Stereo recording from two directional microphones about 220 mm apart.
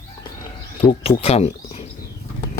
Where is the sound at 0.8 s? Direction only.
25° left (ahead or behind).